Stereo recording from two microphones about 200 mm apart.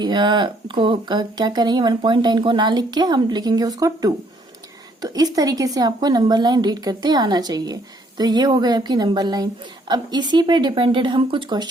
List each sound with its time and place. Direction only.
0.0 s speech: 20° right (ahead or behind)